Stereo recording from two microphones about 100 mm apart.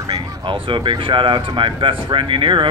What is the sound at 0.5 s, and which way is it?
Speech, 55° right (ahead or behind).